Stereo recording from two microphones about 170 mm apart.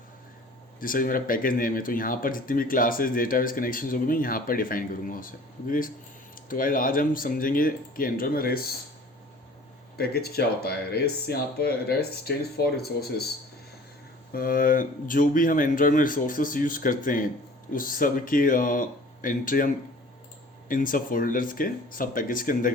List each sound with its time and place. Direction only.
0.8 s speech: 55° left (ahead or behind)
10.0 s speech: 70° left (ahead or behind)
14.3 s speech: 55° left (ahead or behind)